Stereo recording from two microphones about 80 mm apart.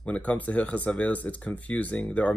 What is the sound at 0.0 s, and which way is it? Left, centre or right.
Speech, centre.